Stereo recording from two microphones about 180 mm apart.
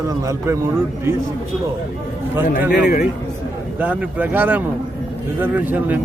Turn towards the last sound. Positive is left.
turn(degrees=-10)  # may be behind; listen again after turning